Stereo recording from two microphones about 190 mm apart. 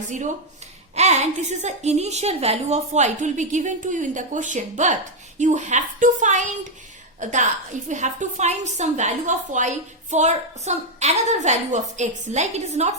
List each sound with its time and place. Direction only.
0.9 s a woman's voice: 35° right (ahead or behind)